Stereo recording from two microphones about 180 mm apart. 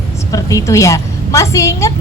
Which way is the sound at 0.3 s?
20° left (ahead or behind).